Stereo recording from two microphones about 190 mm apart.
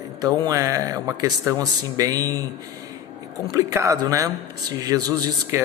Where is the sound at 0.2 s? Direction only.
20° right (ahead or behind).